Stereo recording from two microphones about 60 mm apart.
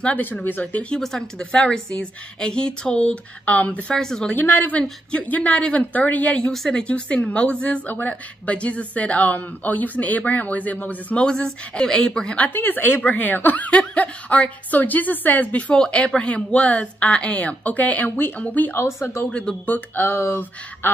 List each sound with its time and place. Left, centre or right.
0.0 s speech: left
0.8 s speech: centre; by 3.8 s left
3.9 s speech: centre
4.3 s speech: left
5.1 s a woman's voice: left
11.2 s speech: centre
12.5 s a woman's voice: left
15.7 s a woman's voice: centre
18.7 s speech: left
19.6 s a woman's voice: left
20.1 s speech: left